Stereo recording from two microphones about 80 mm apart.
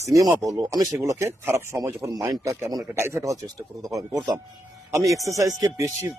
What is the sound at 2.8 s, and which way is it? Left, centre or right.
Speech, right.